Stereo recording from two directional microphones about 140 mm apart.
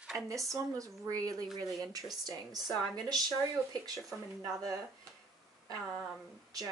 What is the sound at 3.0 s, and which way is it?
Speech, 25° right (ahead or behind).